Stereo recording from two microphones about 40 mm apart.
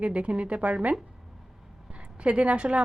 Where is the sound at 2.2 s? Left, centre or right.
Right.